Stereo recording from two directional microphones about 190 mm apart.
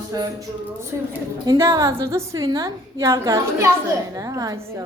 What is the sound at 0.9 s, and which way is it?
A woman's voice, 15° right (ahead or behind).